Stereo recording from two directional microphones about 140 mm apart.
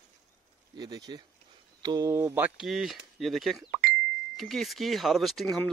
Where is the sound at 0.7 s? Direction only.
30° right (ahead or behind).